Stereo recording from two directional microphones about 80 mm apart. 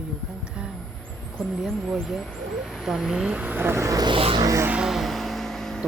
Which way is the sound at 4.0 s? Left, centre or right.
Right.